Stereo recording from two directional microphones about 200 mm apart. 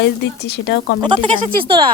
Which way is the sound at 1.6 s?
25° right (ahead or behind).